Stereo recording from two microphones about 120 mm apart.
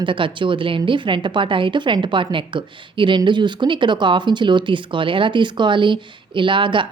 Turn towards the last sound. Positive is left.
turn(degrees=-45)  # may be behind; listen again after turning